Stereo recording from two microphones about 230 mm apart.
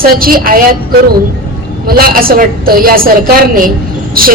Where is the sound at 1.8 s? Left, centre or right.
Right.